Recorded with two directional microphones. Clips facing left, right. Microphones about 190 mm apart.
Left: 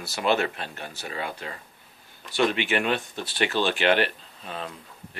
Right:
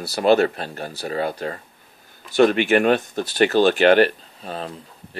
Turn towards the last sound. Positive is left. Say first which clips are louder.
# right 7 dB
turn(degrees=-35)  # may be behind; listen again after turning